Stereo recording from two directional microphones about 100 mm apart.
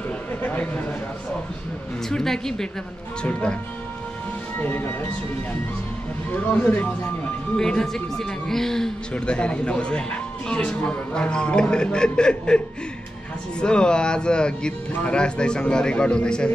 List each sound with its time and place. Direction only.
0.3 s a sound: 15° left (ahead or behind)
2.0 s a woman's voice: 5° left (ahead or behind)
4.6 s speech: 15° left (ahead or behind)
6.3 s speech: 15° left (ahead or behind)